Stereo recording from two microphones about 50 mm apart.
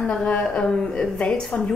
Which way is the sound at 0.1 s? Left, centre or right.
Left.